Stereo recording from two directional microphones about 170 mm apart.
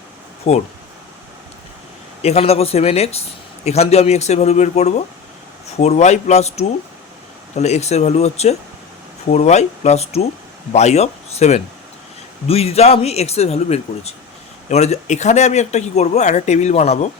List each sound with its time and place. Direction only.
0.4 s a man's voice: 40° left (ahead or behind)
2.2 s a man's voice: 35° left (ahead or behind)